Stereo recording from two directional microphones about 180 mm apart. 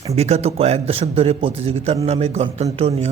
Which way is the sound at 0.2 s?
35° right (ahead or behind).